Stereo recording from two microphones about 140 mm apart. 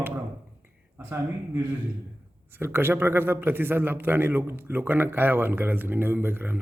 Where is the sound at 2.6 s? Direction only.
15° right (ahead or behind).